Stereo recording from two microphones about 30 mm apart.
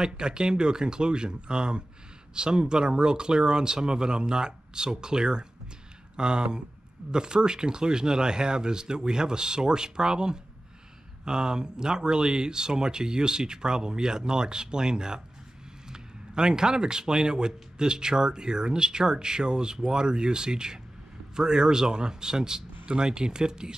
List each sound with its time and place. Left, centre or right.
0.0 s speech: right